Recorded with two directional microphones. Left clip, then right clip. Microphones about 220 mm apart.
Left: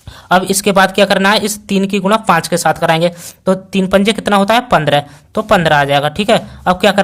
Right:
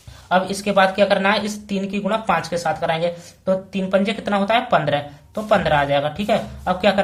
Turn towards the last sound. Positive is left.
turn(degrees=45)  # may be behind; listen again after turning